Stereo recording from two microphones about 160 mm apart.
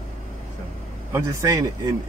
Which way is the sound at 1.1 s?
20° right (ahead or behind).